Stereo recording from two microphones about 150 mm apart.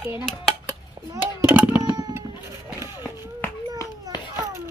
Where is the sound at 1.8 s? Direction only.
25° right (ahead or behind).